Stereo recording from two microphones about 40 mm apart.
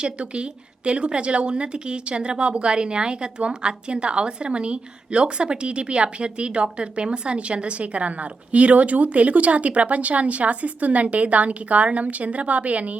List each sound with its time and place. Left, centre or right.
0.0 s a woman's voice: right